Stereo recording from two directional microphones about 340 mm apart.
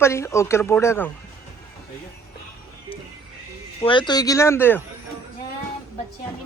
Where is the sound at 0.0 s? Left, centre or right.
Centre.